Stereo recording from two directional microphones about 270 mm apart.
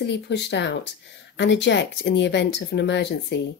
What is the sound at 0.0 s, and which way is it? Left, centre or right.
Speech, left.